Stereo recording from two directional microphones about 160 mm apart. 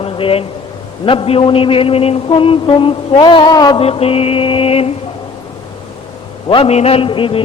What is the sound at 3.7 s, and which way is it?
Mantra, 35° left (ahead or behind).